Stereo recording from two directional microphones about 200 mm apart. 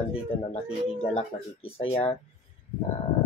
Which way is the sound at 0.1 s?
30° left (ahead or behind).